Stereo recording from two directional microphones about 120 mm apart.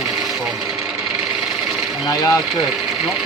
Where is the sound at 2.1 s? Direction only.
25° left (ahead or behind).